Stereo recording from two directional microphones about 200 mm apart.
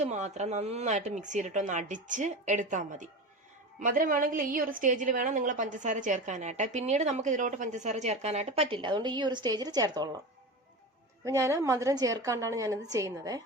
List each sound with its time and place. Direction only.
0.0 s a woman's voice: 35° right (ahead or behind); by 10.1 s 20° right (ahead or behind)
11.3 s a woman's voice: 15° right (ahead or behind)